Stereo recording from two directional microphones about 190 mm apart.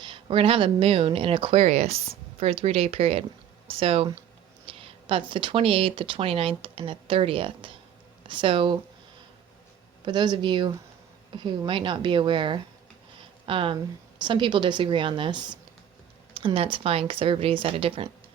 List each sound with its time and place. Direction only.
0.0 s speech: 25° right (ahead or behind)
10.1 s speech: 25° right (ahead or behind)